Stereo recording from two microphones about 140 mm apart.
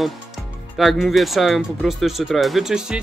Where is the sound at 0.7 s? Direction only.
Centre (ahead or behind).